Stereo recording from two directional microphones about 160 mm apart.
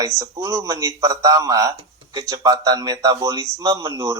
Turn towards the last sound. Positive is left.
turn(degrees=-20)  # may be behind; listen again after turning